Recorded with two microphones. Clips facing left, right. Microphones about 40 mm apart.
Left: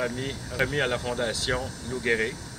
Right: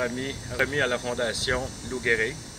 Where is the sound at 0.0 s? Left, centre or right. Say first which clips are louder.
Right 1 dB; centre.